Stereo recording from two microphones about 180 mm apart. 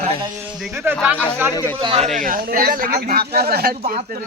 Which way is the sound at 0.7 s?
15° right (ahead or behind).